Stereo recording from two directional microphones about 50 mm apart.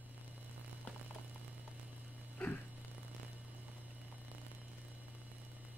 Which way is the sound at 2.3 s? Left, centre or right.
Left.